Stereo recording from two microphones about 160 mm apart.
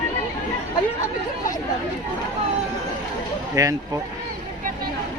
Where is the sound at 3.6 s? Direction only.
20° right (ahead or behind).